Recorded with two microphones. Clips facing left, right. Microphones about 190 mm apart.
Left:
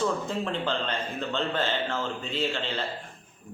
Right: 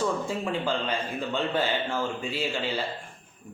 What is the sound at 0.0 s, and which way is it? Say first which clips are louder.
A man's voice: even; 10° right (ahead or behind).